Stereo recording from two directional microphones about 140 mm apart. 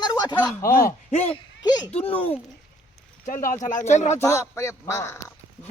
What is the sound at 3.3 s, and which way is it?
Speech, 75° left (ahead or behind).